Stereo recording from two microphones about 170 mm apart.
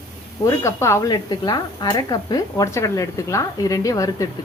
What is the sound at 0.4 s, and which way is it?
Speech, 15° left (ahead or behind).